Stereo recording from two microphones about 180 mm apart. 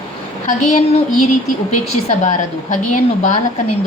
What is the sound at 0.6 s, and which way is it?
Speech, 40° left (ahead or behind).